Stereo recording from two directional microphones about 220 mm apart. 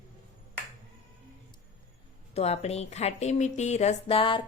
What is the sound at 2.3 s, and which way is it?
Speech, 30° left (ahead or behind).